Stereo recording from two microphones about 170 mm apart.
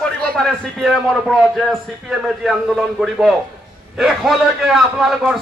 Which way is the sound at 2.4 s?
5° right (ahead or behind).